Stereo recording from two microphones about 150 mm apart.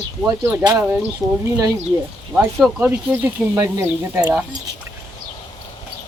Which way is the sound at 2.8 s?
10° right (ahead or behind).